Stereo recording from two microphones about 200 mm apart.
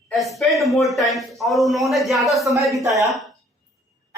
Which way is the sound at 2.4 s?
15° right (ahead or behind).